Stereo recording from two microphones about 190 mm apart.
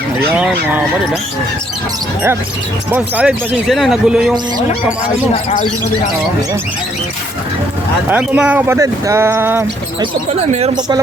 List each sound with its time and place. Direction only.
0.3 s speech: 5° right (ahead or behind)
2.9 s speech: 5° right (ahead or behind)
5.3 s speech: 30° left (ahead or behind)
8.1 s speech: 5° right (ahead or behind)